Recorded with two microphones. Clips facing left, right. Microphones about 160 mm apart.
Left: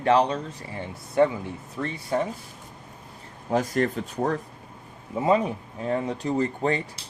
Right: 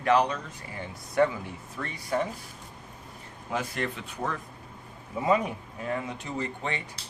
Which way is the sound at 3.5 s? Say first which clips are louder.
Left 8 dB; 40° left (ahead or behind).